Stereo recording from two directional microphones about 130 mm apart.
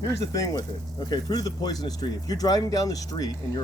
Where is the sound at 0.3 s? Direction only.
25° left (ahead or behind).